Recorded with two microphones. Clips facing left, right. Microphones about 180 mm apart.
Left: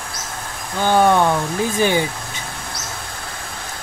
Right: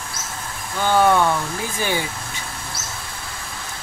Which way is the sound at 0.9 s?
20° left (ahead or behind).